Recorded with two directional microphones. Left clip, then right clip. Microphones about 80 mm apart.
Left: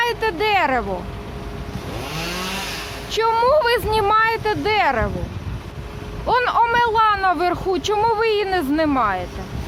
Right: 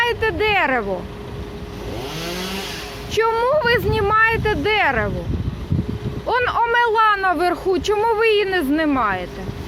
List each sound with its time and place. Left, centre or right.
0.0 s a sound: left
3.1 s speech: centre
6.2 s speech: left; by 9.2 s centre